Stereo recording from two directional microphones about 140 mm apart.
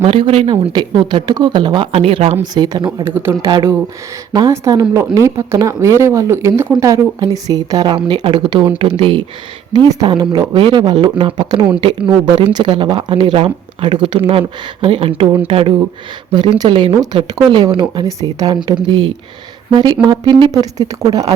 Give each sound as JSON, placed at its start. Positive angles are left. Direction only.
{"t": 0.0, "sound": "speech", "side_deg": -45}
{"t": 2.4, "sound": "speech", "side_deg": -30}
{"t": 3.3, "sound": "speech", "side_deg": -15}
{"t": 4.3, "sound": "a woman's voice", "side_deg": -30}
{"t": 9.7, "sound": "speech", "side_deg": -30}